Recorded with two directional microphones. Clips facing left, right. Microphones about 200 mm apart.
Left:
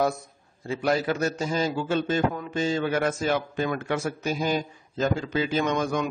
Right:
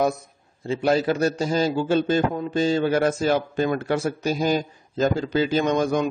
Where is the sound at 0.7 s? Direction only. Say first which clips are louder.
Right 4 dB; 25° right (ahead or behind).